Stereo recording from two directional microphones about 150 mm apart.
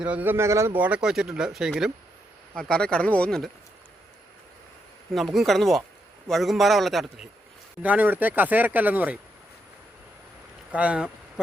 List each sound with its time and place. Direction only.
0.0 s a man's voice: 10° right (ahead or behind); by 3.5 s 5° left (ahead or behind)
5.1 s a man's voice: centre (ahead or behind)
7.8 s speech: 10° right (ahead or behind)
10.7 s speech: 10° right (ahead or behind)